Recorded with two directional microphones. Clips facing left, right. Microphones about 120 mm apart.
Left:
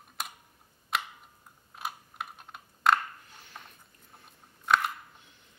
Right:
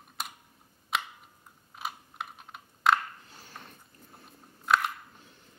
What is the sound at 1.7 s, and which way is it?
Computer keyboard, centre (ahead or behind).